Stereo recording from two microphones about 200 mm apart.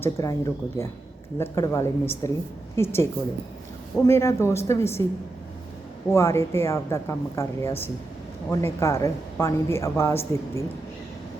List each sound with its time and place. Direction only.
0.0 s speech: 15° left (ahead or behind)
6.1 s speech: 15° left (ahead or behind)